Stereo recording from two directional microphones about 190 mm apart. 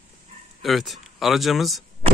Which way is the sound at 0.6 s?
Centre (ahead or behind).